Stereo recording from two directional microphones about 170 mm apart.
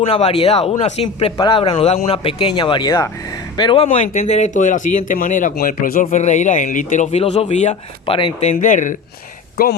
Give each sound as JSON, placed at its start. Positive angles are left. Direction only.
{"t": 0.0, "sound": "speech", "side_deg": 35}
{"t": 1.0, "sound": "speech", "side_deg": 25}
{"t": 8.5, "sound": "speech", "side_deg": 50}
{"t": 9.6, "sound": "speech", "side_deg": 65}